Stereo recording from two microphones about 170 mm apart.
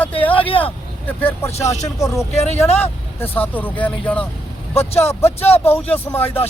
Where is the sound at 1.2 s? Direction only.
15° left (ahead or behind).